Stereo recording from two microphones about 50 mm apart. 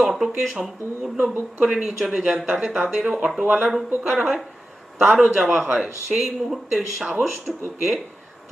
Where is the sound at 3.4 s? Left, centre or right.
Right.